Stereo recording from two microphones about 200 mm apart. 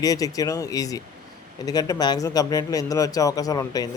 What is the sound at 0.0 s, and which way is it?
Speech, 20° left (ahead or behind).